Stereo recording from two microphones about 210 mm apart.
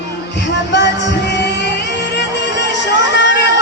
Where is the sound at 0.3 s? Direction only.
55° left (ahead or behind).